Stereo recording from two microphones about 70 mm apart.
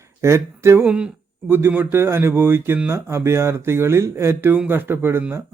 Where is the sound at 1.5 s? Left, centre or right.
Right.